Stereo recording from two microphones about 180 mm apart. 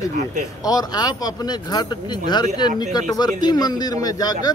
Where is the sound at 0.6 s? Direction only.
20° left (ahead or behind).